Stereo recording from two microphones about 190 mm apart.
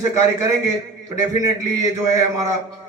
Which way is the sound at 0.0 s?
15° right (ahead or behind).